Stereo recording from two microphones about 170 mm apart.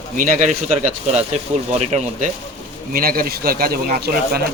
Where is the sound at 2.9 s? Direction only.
60° right (ahead or behind).